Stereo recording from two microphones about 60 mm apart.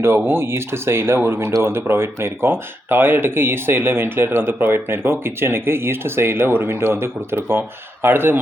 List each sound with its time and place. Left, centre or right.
0.0 s speech: right